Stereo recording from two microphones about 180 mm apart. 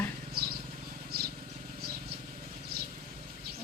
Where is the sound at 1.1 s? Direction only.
60° right (ahead or behind).